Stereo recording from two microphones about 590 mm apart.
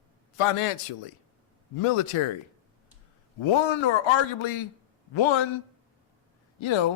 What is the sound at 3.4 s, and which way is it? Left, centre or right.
A man's voice, left.